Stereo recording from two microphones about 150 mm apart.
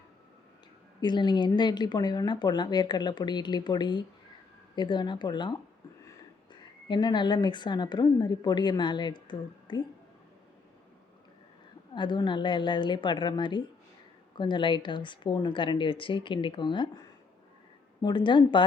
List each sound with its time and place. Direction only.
1.0 s a woman's voice: 30° left (ahead or behind)
11.9 s speech: 30° left (ahead or behind)
18.0 s speech: 30° left (ahead or behind)